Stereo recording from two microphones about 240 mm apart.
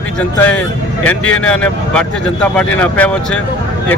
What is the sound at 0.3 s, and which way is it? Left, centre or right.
Speech, centre.